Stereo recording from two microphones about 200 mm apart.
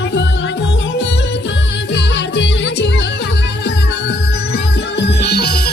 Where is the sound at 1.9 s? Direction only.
60° left (ahead or behind).